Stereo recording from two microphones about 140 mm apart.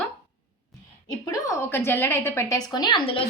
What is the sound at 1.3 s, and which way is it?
A woman's voice, 20° left (ahead or behind).